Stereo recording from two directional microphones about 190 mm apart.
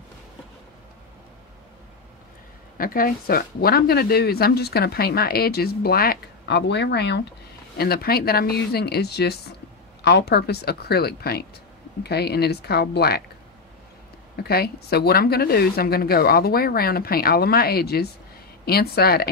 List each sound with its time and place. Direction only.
2.8 s speech: 50° left (ahead or behind)
14.3 s speech: 55° left (ahead or behind)